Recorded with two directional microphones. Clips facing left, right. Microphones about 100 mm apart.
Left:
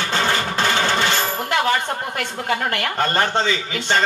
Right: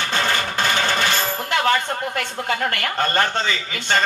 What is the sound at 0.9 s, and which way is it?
Speech, 20° left (ahead or behind).